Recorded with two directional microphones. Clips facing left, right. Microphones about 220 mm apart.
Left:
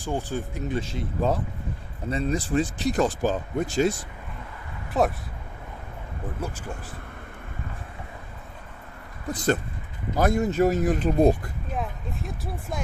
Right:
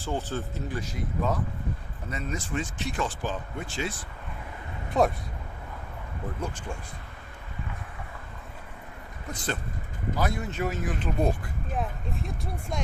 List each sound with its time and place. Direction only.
0.0 s speech: 15° left (ahead or behind); by 3.9 s 40° left (ahead or behind)
4.9 s speech: 5° left (ahead or behind)
6.4 s speech: 5° left (ahead or behind)
9.3 s speech: 40° left (ahead or behind)
11.7 s speech: centre (ahead or behind)